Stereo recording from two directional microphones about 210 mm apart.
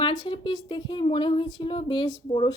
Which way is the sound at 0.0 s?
25° left (ahead or behind).